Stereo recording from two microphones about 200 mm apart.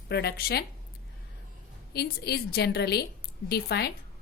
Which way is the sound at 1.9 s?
55° left (ahead or behind).